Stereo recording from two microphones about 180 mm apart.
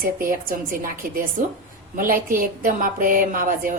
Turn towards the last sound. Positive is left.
turn(degrees=-50)  # may be behind; listen again after turning